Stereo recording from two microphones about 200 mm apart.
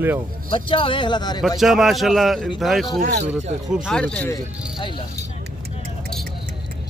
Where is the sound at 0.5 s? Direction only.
25° left (ahead or behind).